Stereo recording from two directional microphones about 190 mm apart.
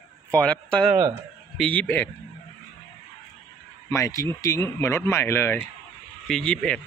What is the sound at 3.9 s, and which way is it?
A man's voice, 15° left (ahead or behind).